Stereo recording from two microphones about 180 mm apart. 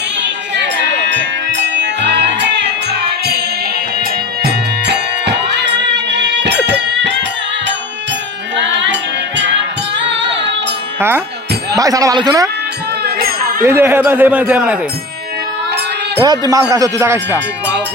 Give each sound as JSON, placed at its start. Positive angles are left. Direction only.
{"t": 1.0, "sound": "music", "side_deg": -80}
{"t": 4.4, "sound": "music", "side_deg": -70}
{"t": 8.5, "sound": "music", "side_deg": -80}
{"t": 11.8, "sound": "speech", "side_deg": -20}
{"t": 13.1, "sound": "a sound", "side_deg": -55}
{"t": 13.6, "sound": "a man's voice", "side_deg": -15}
{"t": 16.2, "sound": "speech", "side_deg": -25}